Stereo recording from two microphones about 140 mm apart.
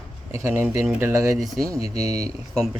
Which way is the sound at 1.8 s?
50° left (ahead or behind).